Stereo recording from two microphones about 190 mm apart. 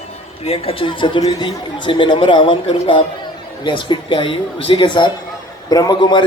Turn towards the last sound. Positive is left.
turn(degrees=20)  # may be behind; listen again after turning